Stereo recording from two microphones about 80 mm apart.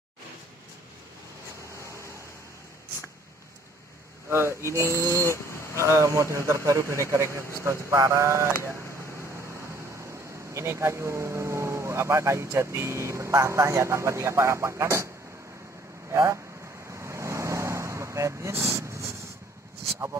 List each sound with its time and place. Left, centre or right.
1.8 s vehicle: left
4.3 s speech: right
5.2 s a sound: left
5.8 s speech: right
10.5 s speech: right
16.1 s speech: right
16.9 s vehicle: right